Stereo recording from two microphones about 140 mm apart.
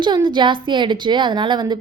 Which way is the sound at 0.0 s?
35° right (ahead or behind).